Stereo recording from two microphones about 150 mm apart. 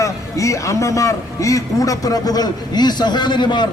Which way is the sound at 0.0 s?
20° left (ahead or behind).